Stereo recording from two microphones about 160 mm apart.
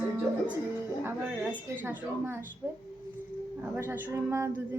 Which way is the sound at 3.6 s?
10° right (ahead or behind).